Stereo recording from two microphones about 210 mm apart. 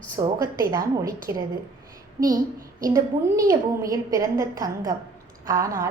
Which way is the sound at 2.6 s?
15° right (ahead or behind).